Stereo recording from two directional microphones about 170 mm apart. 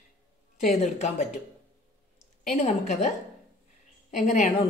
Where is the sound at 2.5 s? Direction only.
40° left (ahead or behind).